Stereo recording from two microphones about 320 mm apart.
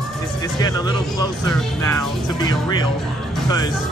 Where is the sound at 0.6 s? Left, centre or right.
Centre.